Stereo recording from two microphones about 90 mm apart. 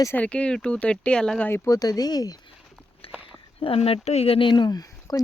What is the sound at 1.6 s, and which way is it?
Speech, 45° left (ahead or behind).